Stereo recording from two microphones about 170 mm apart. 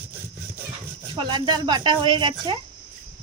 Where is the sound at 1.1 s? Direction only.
30° right (ahead or behind).